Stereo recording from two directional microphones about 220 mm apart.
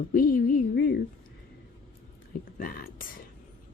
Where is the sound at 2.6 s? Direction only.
40° left (ahead or behind).